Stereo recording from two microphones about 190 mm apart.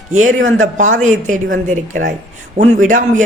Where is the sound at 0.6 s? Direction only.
40° right (ahead or behind).